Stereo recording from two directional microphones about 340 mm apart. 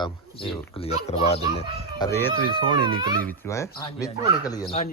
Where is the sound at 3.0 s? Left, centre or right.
Centre.